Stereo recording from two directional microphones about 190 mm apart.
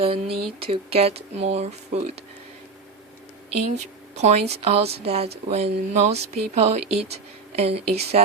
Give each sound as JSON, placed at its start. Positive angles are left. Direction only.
{"t": 0.0, "sound": "speech", "side_deg": -30}
{"t": 4.2, "sound": "speech", "side_deg": -35}